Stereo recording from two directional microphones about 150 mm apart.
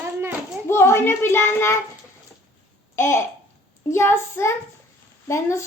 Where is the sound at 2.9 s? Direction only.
15° left (ahead or behind).